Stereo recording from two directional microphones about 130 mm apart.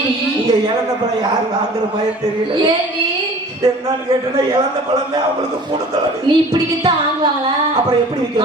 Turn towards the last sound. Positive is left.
turn(degrees=-30)  # may be behind; listen again after turning